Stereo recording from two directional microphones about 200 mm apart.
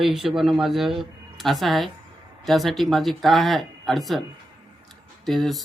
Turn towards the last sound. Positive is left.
turn(degrees=0)  # may be behind; listen again after turning